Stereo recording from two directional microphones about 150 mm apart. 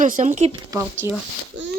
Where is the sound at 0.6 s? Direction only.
15° right (ahead or behind).